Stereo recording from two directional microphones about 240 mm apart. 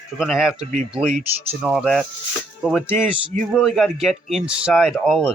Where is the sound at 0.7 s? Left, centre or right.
Right.